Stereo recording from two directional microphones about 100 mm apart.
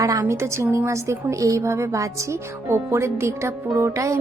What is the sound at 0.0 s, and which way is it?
A woman's voice, 30° right (ahead or behind).